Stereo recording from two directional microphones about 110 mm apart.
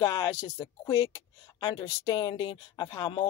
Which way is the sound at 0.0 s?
35° left (ahead or behind).